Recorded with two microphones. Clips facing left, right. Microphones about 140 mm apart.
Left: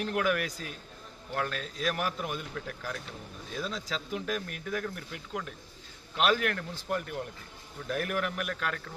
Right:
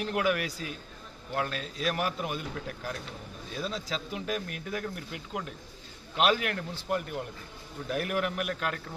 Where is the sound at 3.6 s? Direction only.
5° right (ahead or behind).